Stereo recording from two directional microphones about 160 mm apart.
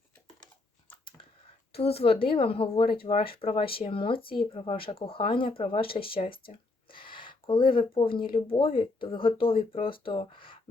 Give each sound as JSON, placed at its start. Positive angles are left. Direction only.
{"t": 1.8, "sound": "speech", "side_deg": 40}
{"t": 6.2, "sound": "speech", "side_deg": 65}
{"t": 6.9, "sound": "speech", "side_deg": 30}